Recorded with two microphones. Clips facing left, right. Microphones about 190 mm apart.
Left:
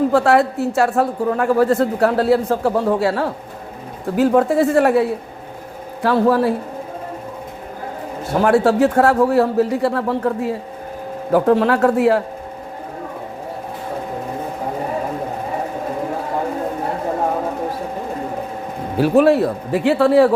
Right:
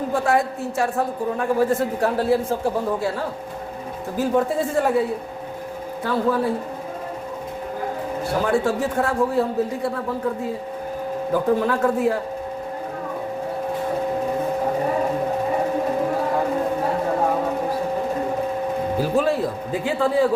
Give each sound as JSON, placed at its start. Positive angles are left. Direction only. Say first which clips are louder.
{"t": 0.1, "sound": "a woman's voice", "louder": "left 6 dB", "side_deg": 75}
{"t": 8.4, "sound": "a woman's voice", "louder": "left 8 dB", "side_deg": 75}
{"t": 18.9, "sound": "a woman's voice", "louder": "left 9 dB", "side_deg": 70}